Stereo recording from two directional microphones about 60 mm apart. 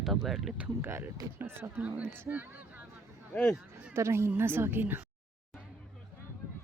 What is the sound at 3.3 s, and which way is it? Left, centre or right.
Speech, centre.